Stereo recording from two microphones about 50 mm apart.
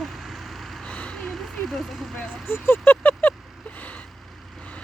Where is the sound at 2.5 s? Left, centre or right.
Left.